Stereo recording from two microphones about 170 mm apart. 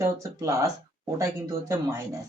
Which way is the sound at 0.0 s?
20° right (ahead or behind).